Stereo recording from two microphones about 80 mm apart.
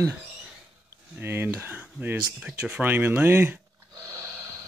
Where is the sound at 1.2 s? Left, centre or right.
Right; by 2.8 s centre.